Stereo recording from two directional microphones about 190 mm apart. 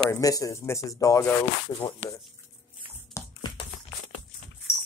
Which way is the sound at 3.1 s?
25° left (ahead or behind).